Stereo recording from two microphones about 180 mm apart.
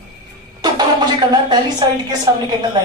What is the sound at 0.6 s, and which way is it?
Speech, 25° right (ahead or behind).